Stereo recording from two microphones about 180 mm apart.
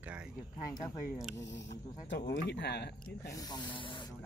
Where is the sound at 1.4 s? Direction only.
85° left; by 2.9 s 70° left (ahead or behind).